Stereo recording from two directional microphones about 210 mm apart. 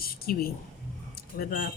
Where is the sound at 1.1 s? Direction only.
45° left (ahead or behind).